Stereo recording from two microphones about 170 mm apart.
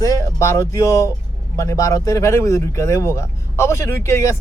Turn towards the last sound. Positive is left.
turn(degrees=15)  # may be behind; listen again after turning